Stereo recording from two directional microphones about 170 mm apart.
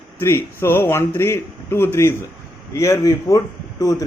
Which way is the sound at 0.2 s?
15° left (ahead or behind).